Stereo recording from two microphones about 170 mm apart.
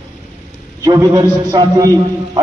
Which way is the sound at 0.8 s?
20° right (ahead or behind).